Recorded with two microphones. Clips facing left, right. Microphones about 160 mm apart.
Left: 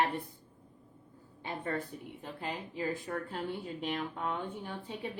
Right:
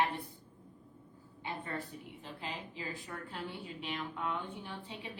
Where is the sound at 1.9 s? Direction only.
45° left (ahead or behind).